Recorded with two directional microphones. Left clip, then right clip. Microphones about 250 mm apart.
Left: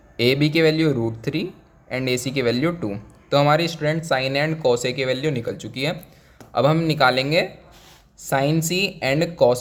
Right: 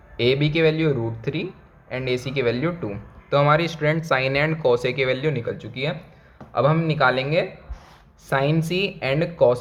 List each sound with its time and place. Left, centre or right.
0.2 s speech: left